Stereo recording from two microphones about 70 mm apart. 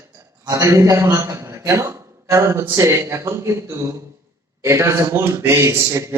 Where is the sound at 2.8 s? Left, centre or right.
Right.